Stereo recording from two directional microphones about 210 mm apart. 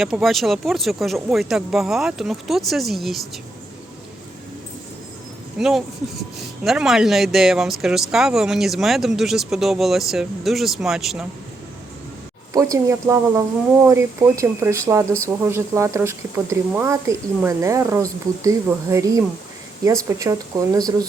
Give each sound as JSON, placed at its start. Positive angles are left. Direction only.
{"t": 0.0, "sound": "speech", "side_deg": 0}
{"t": 5.5, "sound": "speech", "side_deg": 0}
{"t": 12.5, "sound": "speech", "side_deg": -15}